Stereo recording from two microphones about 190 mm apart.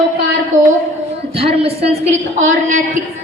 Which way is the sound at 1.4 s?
30° right (ahead or behind).